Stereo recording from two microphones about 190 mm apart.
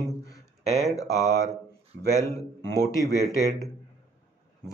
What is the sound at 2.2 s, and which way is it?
Speech, 15° left (ahead or behind).